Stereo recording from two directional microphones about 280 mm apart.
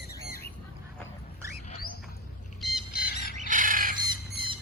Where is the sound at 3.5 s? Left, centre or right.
Right.